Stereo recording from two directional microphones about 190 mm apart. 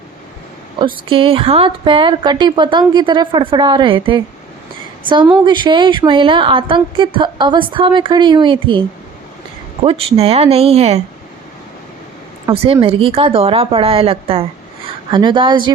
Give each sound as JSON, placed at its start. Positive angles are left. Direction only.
{"t": 1.0, "sound": "a woman's voice", "side_deg": -25}
{"t": 9.8, "sound": "speech", "side_deg": -30}
{"t": 12.6, "sound": "a woman's voice", "side_deg": -30}